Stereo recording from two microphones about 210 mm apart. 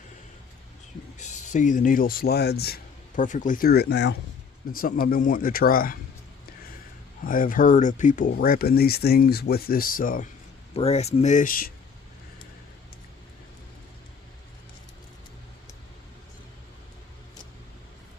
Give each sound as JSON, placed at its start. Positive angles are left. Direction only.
{"t": 1.2, "sound": "speech", "side_deg": 35}
{"t": 7.3, "sound": "speech", "side_deg": 40}
{"t": 10.8, "sound": "speech", "side_deg": 30}